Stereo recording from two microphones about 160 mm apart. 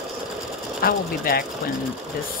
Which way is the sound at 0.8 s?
65° left (ahead or behind).